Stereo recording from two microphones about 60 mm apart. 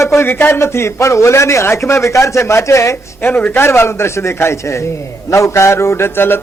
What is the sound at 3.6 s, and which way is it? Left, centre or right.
A man's voice, left.